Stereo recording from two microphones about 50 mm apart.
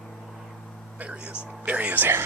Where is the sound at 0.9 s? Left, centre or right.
Right.